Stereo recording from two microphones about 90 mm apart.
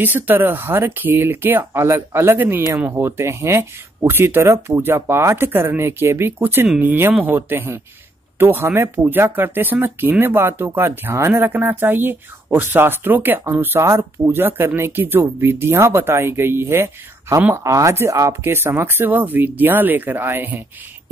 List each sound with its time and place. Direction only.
0.0 s a woman's voice: 20° right (ahead or behind)